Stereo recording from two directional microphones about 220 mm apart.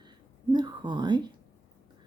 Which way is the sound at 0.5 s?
20° right (ahead or behind).